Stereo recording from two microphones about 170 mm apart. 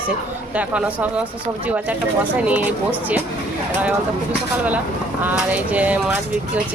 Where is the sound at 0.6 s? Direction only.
10° right (ahead or behind).